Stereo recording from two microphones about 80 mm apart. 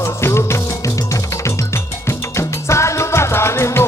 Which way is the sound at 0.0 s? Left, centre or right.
Left.